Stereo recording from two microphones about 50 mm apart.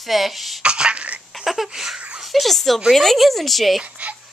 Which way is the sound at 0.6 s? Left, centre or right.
Centre.